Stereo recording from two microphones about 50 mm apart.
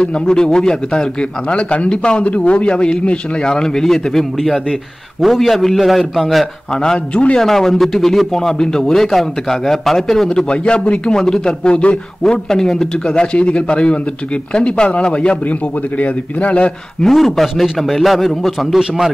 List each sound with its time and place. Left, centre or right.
0.0 s a man's voice: centre
6.8 s a man's voice: centre
7.4 s a man's voice: centre
11.7 s a man's voice: left
12.2 s a man's voice: centre; by 16.7 s left
17.0 s a man's voice: centre